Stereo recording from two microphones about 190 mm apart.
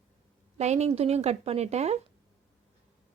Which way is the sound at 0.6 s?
35° right (ahead or behind).